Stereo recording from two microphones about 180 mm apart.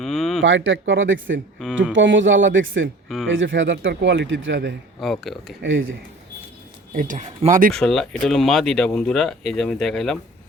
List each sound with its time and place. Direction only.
0.0 s a sound: centre (ahead or behind)
0.4 s speech: 90° right
1.5 s speech: centre (ahead or behind)
1.9 s speech: 90° right
4.9 s speech: centre (ahead or behind)
5.6 s speech: 90° right
6.9 s speech: 45° right (ahead or behind)
7.7 s speech: 5° left (ahead or behind)